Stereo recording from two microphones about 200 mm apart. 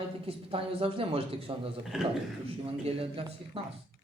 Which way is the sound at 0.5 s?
25° right (ahead or behind).